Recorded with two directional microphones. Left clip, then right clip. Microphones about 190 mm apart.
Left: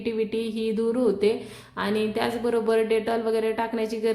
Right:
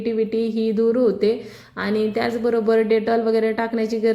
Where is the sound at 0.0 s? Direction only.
20° right (ahead or behind).